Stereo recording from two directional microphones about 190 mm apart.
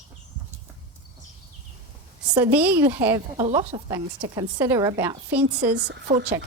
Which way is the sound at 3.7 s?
25° right (ahead or behind).